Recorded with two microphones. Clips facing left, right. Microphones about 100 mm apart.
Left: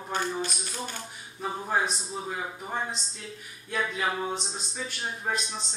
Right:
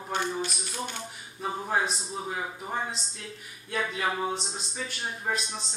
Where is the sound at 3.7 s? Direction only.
Centre (ahead or behind).